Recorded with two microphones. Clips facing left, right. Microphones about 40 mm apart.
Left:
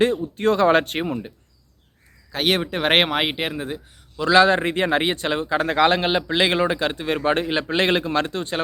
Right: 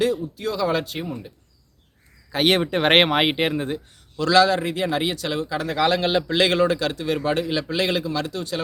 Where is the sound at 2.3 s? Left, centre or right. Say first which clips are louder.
Right 2 dB; centre.